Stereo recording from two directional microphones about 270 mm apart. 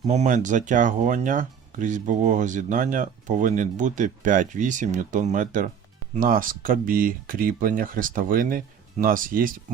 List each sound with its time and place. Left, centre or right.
0.0 s speech: right